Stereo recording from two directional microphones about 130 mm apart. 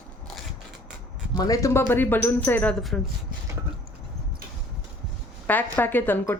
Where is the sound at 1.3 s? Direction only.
30° left (ahead or behind).